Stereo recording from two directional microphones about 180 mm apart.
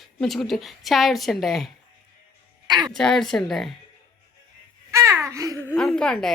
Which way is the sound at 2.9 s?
5° left (ahead or behind).